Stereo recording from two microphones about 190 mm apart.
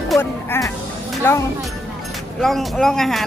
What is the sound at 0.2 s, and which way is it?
Music, 10° left (ahead or behind).